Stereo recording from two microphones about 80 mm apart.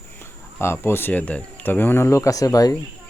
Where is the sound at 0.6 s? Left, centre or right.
Left.